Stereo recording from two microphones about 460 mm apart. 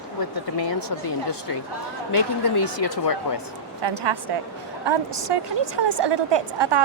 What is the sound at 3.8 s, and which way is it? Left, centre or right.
A woman's voice, right.